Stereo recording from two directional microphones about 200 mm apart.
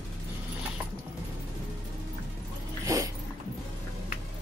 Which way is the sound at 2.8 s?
15° right (ahead or behind).